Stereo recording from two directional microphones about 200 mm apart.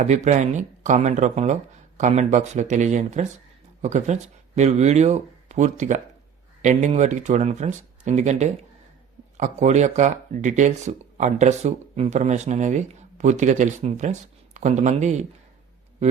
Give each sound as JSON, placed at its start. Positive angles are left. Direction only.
{"t": 0.1, "sound": "speech", "side_deg": -35}